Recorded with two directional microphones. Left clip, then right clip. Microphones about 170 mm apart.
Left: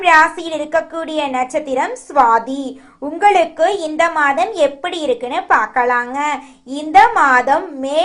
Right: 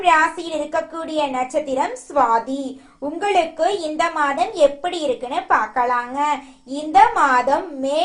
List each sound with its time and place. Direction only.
0.0 s a woman's voice: 35° left (ahead or behind)